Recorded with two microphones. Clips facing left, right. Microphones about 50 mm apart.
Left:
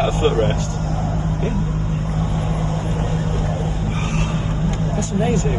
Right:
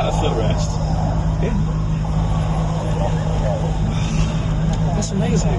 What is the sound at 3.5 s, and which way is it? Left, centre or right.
Vehicle, left.